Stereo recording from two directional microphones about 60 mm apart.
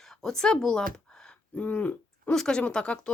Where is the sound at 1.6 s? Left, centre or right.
Left.